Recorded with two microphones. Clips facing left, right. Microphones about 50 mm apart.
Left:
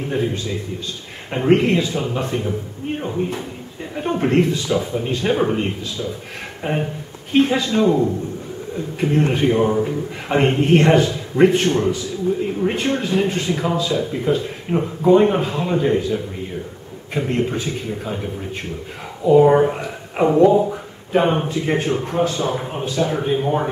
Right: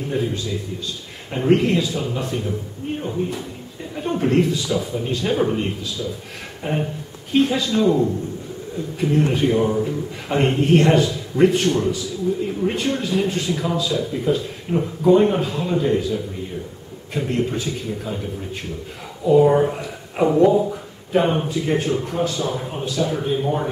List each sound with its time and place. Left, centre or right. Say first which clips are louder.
0.1 s speech: left 1 dB; left
9.7 s speech: left 2 dB; left
10.2 s speech: left 2 dB; left
19.2 s speech: left 2 dB; left